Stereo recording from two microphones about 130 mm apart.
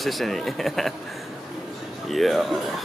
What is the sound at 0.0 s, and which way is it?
Speech, centre (ahead or behind).